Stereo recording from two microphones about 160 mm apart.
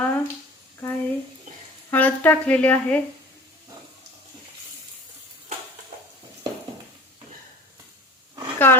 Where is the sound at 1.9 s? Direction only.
10° left (ahead or behind).